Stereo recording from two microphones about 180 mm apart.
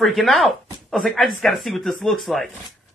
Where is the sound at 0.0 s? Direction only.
Centre (ahead or behind).